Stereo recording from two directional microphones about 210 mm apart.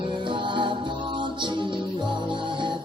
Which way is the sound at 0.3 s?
20° right (ahead or behind).